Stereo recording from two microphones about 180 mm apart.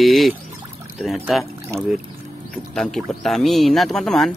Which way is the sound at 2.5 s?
Centre (ahead or behind).